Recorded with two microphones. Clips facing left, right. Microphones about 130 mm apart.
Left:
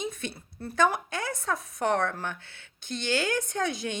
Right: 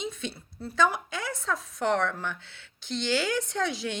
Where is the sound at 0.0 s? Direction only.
55° left (ahead or behind).